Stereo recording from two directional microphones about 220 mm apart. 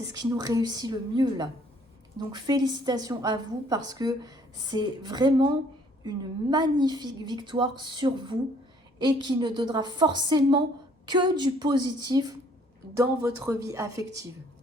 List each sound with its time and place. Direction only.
0.3 s a woman's voice: 15° right (ahead or behind)